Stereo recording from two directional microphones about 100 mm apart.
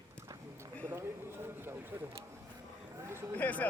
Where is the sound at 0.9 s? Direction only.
25° right (ahead or behind).